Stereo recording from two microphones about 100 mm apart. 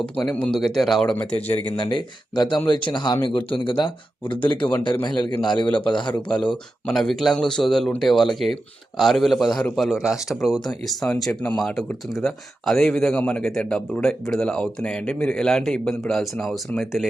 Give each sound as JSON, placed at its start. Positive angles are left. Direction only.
{"t": 0.2, "sound": "speech", "side_deg": 0}
{"t": 1.6, "sound": "speech", "side_deg": 50}
{"t": 3.2, "sound": "speech", "side_deg": 60}
{"t": 4.2, "sound": "speech", "side_deg": 15}
{"t": 4.7, "sound": "speech", "side_deg": 50}
{"t": 5.6, "sound": "speech", "side_deg": 10}
{"t": 5.9, "sound": "speech", "side_deg": 50}
{"t": 6.8, "sound": "speech", "side_deg": 5}